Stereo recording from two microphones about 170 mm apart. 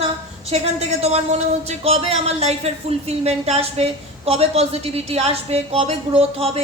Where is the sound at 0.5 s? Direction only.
40° right (ahead or behind).